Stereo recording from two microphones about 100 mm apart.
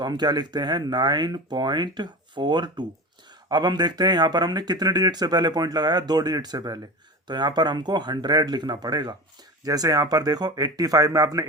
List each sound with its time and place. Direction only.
0.0 s speech: 45° right (ahead or behind)